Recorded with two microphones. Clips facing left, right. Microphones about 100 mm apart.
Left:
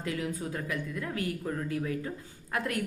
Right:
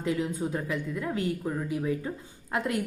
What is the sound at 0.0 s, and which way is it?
A woman's voice, 20° right (ahead or behind).